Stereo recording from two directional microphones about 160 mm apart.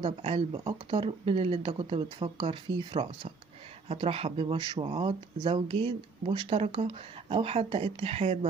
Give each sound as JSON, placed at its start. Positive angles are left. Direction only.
{"t": 0.0, "sound": "speech", "side_deg": -35}